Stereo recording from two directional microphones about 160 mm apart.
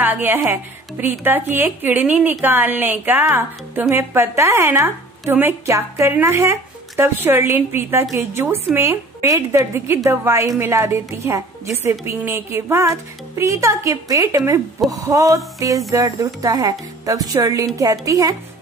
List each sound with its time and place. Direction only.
0.0 s a woman's voice: 10° right (ahead or behind)